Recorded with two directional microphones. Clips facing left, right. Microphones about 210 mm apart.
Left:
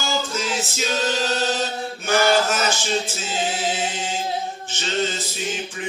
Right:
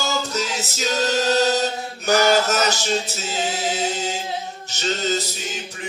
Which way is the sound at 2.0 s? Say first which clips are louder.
Right 1 dB; 40° right (ahead or behind).